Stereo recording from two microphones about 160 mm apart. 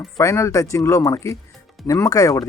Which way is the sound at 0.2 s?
20° left (ahead or behind).